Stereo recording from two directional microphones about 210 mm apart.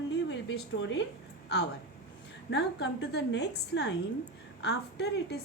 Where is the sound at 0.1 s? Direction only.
55° left (ahead or behind).